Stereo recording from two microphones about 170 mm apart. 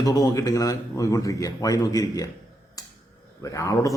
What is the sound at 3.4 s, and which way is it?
Speech, 20° left (ahead or behind).